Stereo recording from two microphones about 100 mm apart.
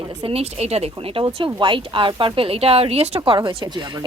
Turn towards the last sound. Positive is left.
turn(degrees=-50)  # may be behind; listen again after turning